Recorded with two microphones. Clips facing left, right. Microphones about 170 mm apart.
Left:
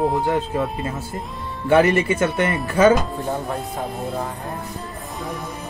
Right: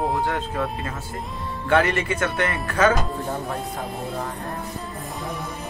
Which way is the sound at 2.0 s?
10° left (ahead or behind).